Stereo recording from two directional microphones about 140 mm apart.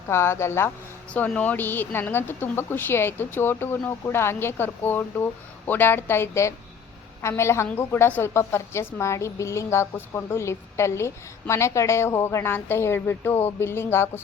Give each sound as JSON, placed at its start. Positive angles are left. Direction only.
{"t": 0.1, "sound": "a woman's voice", "side_deg": 20}